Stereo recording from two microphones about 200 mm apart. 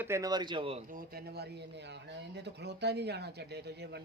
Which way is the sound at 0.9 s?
45° right (ahead or behind).